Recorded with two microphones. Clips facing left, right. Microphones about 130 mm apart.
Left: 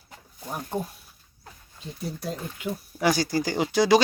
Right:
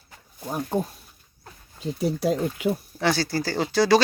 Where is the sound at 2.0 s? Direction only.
75° right (ahead or behind).